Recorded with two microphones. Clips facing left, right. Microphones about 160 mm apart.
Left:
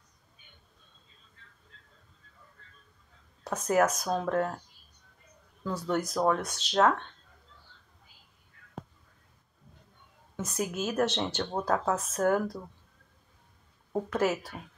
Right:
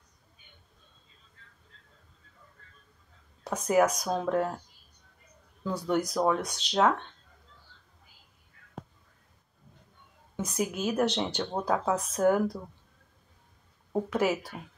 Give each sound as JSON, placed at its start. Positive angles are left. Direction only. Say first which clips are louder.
{"t": 3.4, "sound": "speech", "louder": "right 1 dB", "side_deg": -10}
{"t": 5.6, "sound": "speech", "louder": "right 2 dB", "side_deg": -15}
{"t": 10.3, "sound": "speech", "louder": "right 2 dB", "side_deg": -15}
{"t": 14.1, "sound": "speech", "louder": "even", "side_deg": -10}